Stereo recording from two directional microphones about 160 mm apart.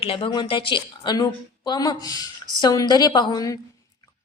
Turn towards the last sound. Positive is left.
turn(degrees=25)  # may be behind; listen again after turning